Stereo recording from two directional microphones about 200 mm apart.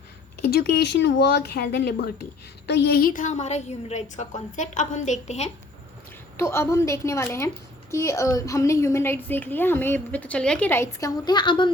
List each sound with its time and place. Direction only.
0.5 s a woman's voice: 50° left (ahead or behind); by 5.5 s 35° left (ahead or behind)
6.3 s a woman's voice: 15° left (ahead or behind)